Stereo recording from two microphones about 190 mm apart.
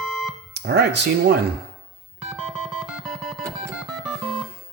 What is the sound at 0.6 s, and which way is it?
Speech, 60° right (ahead or behind).